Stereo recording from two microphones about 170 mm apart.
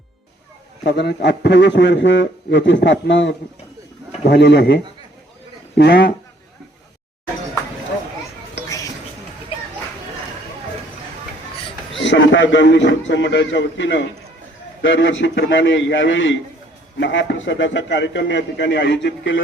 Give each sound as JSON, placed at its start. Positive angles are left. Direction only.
{"t": 0.9, "sound": "a man's voice", "side_deg": 90}
{"t": 12.0, "sound": "a man's voice", "side_deg": 90}